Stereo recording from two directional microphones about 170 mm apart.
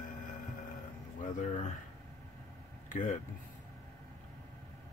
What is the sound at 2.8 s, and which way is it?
Speech, 45° left (ahead or behind).